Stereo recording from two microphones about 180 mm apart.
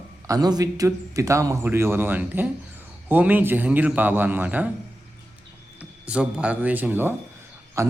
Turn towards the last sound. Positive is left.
turn(degrees=-15)  # may be behind; listen again after turning